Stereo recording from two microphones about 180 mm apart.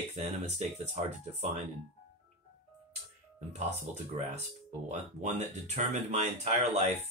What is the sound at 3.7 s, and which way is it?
Speech, 40° right (ahead or behind).